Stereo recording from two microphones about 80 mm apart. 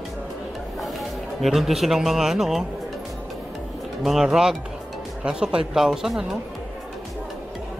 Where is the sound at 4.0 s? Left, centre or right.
Centre.